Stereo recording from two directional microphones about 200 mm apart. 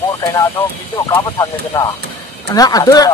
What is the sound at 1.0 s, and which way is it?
Speech, 15° left (ahead or behind).